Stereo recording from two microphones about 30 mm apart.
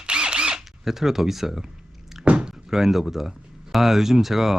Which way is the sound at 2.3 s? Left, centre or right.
Right.